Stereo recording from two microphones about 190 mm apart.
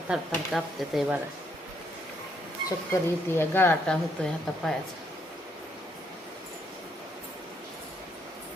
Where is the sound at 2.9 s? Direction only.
10° left (ahead or behind).